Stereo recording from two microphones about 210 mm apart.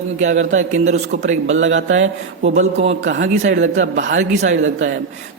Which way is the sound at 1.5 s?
65° right (ahead or behind).